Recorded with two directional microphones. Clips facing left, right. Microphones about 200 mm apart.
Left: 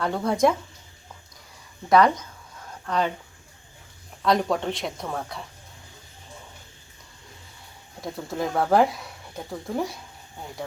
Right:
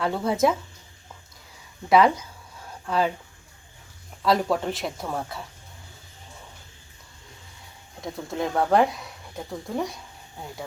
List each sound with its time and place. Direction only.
0.0 s speech: 5° right (ahead or behind)
1.9 s speech: 5° right (ahead or behind)
4.2 s speech: 5° right (ahead or behind)
8.0 s speech: centre (ahead or behind)